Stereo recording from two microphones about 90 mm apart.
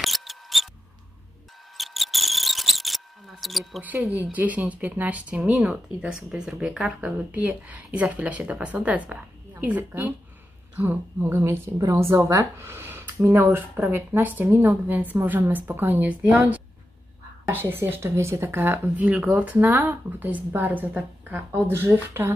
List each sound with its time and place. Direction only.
0.0 s mouse: centre (ahead or behind)
1.8 s a sound: centre (ahead or behind)
3.8 s a woman's voice: 15° right (ahead or behind)